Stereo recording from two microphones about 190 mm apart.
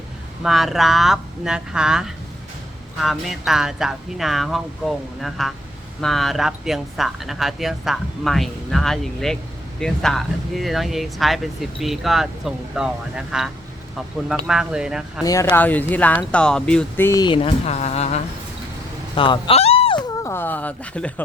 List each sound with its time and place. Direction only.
0.4 s speech: centre (ahead or behind)
15.2 s speech: 20° left (ahead or behind)
20.2 s speech: 10° left (ahead or behind)